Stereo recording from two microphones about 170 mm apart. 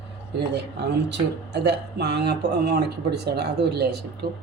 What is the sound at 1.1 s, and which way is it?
Speech, 85° right.